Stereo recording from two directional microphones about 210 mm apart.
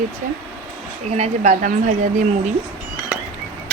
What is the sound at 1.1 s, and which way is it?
A woman's voice, 30° right (ahead or behind).